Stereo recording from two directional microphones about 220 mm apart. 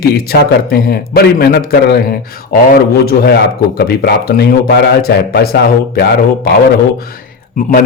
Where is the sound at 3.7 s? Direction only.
45° left (ahead or behind).